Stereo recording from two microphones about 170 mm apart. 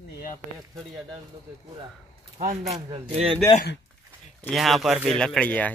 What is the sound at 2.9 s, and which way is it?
Speech, 35° right (ahead or behind).